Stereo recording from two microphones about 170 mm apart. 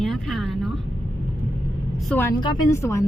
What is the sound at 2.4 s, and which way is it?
Speech, 25° left (ahead or behind).